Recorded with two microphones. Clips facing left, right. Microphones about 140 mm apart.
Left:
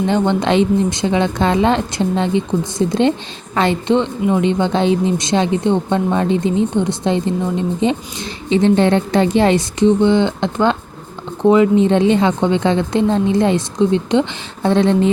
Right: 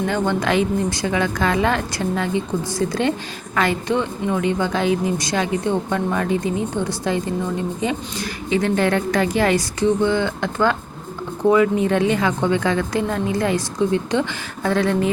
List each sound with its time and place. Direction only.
0.1 s speech: 25° left (ahead or behind)